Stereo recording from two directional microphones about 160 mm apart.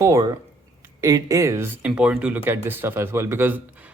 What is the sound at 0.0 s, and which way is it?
Speech, 20° right (ahead or behind).